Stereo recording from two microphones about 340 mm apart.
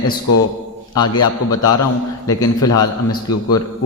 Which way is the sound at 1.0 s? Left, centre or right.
Left.